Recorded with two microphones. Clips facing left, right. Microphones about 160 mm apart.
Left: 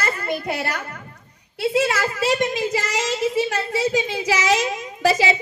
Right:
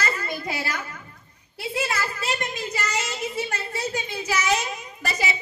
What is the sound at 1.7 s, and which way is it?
Speech, 90° left.